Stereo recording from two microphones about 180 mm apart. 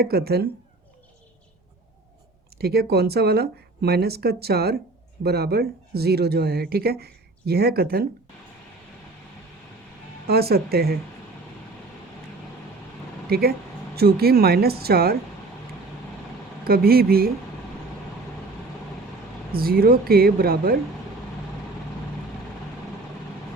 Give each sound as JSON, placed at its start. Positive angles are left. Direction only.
{"t": 0.0, "sound": "speech", "side_deg": -60}
{"t": 2.6, "sound": "speech", "side_deg": -60}
{"t": 10.2, "sound": "speech", "side_deg": -60}
{"t": 13.2, "sound": "speech", "side_deg": -60}
{"t": 16.6, "sound": "speech", "side_deg": -55}
{"t": 19.5, "sound": "speech", "side_deg": -55}